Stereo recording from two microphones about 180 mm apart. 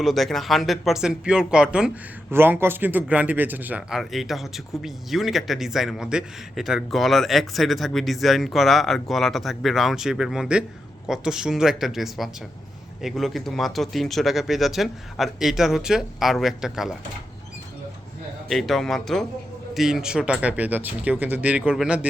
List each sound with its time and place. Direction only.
0.0 s a man's voice: centre (ahead or behind)
18.4 s a man's voice: centre (ahead or behind)